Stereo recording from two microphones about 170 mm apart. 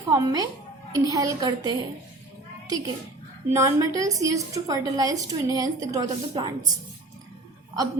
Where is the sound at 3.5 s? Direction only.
20° right (ahead or behind).